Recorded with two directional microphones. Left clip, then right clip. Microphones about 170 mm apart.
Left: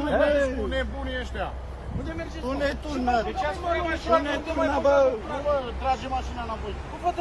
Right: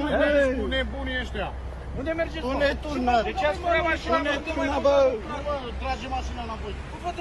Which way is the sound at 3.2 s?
Centre (ahead or behind).